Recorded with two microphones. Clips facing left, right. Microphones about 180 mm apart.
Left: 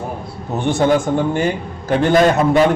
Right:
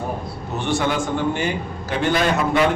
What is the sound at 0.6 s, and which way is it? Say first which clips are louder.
A man's voice: left 6 dB; 50° left (ahead or behind).